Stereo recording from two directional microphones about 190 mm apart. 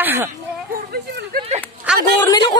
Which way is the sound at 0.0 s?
10° right (ahead or behind).